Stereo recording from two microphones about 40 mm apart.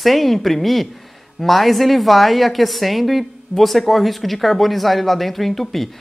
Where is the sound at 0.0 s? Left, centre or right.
Centre.